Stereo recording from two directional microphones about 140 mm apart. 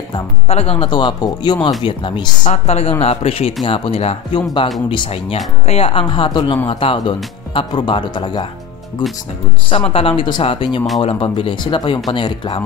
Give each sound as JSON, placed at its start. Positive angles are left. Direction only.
{"t": 0.5, "sound": "speech", "side_deg": 45}
{"t": 2.5, "sound": "speech", "side_deg": 45}
{"t": 9.7, "sound": "speech", "side_deg": 40}